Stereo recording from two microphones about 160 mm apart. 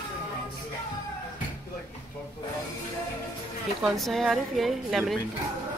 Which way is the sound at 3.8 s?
Centre (ahead or behind).